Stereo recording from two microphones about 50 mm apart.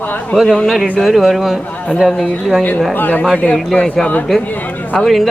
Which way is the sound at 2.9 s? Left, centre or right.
Left.